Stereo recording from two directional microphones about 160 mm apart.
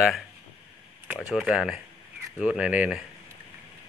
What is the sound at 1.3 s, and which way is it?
Speech, centre (ahead or behind).